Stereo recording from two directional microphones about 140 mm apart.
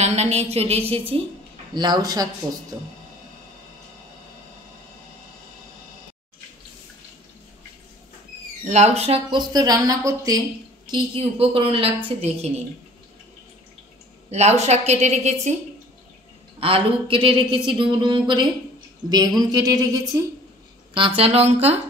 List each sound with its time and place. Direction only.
0.0 s a woman's voice: 50° right (ahead or behind)
1.7 s speech: 30° right (ahead or behind)
8.6 s speech: 55° right (ahead or behind); by 10.4 s 25° right (ahead or behind)
10.9 s a woman's voice: 40° right (ahead or behind)
14.3 s a woman's voice: 50° right (ahead or behind)
16.5 s speech: 40° right (ahead or behind); by 20.2 s 25° right (ahead or behind)
20.9 s a woman's voice: 40° right (ahead or behind)